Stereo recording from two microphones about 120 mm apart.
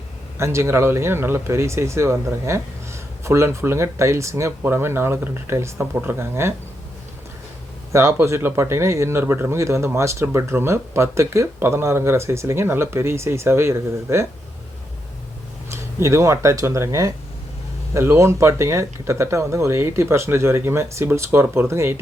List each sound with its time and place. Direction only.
0.3 s speech: 25° right (ahead or behind)
7.9 s speech: 25° right (ahead or behind)
15.7 s speech: 25° right (ahead or behind)